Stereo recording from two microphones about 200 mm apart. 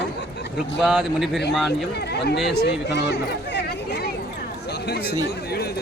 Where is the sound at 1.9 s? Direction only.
55° left (ahead or behind).